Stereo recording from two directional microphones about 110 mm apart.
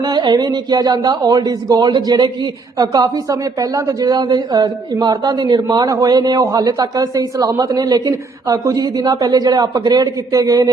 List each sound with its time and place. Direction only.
0.0 s speech: 40° right (ahead or behind)